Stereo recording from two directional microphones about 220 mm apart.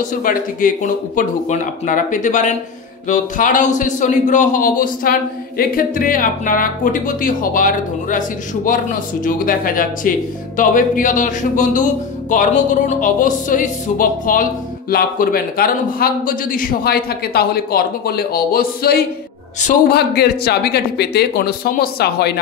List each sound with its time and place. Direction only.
0.0 s a man's voice: 40° left (ahead or behind)